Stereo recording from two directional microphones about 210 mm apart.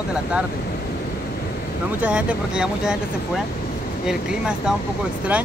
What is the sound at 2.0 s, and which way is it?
Speech, 5° right (ahead or behind).